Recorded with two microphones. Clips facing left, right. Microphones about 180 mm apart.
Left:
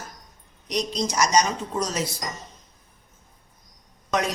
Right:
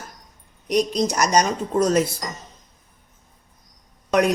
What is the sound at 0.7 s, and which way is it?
A woman's voice, 55° right (ahead or behind).